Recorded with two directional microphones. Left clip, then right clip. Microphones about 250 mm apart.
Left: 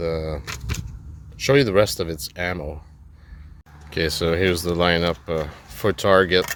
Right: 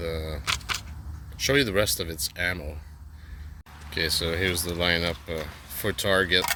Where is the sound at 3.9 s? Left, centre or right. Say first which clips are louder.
Left 5 dB; left.